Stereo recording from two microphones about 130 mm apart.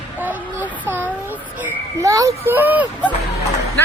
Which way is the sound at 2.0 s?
25° right (ahead or behind).